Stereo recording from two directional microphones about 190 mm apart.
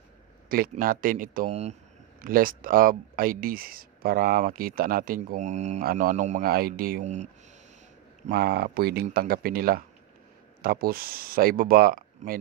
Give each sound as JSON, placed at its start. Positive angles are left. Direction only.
{"t": 0.5, "sound": "speech", "side_deg": -50}
{"t": 1.5, "sound": "a man's voice", "side_deg": -35}
{"t": 2.2, "sound": "a man's voice", "side_deg": -45}
{"t": 6.5, "sound": "speech", "side_deg": -50}
{"t": 8.3, "sound": "speech", "side_deg": -55}
{"t": 12.2, "sound": "a man's voice", "side_deg": -35}